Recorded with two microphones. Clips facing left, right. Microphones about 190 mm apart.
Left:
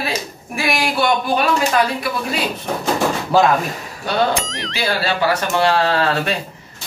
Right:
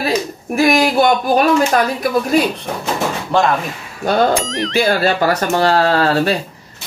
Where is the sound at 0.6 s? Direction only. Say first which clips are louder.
Right 7 dB; 45° right (ahead or behind).